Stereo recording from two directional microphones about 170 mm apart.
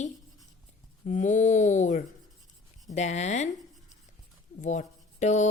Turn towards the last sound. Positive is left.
turn(degrees=45)  # may be behind; listen again after turning